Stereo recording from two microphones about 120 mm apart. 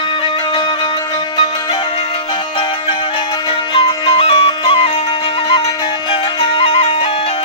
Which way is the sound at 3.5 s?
50° left (ahead or behind).